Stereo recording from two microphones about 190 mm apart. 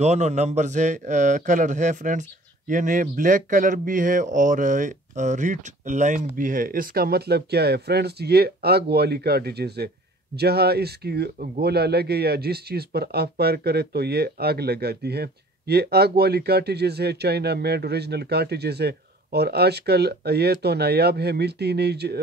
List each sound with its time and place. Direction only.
0.0 s a man's voice: 35° right (ahead or behind); by 22.2 s 60° right (ahead or behind)